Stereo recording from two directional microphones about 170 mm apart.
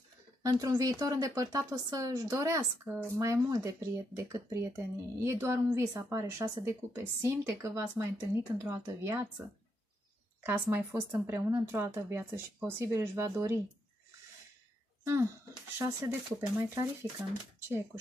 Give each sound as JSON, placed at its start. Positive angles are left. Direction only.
{"t": 0.4, "sound": "speech", "side_deg": -20}
{"t": 10.4, "sound": "speech", "side_deg": -10}
{"t": 15.8, "sound": "speech", "side_deg": -15}